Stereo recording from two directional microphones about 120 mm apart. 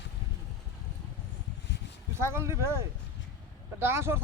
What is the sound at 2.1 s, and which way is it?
A man's voice, 20° right (ahead or behind).